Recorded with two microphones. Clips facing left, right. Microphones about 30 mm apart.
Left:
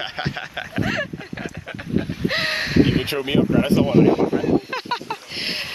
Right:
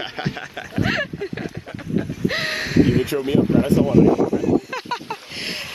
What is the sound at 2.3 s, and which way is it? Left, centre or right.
Speech, centre.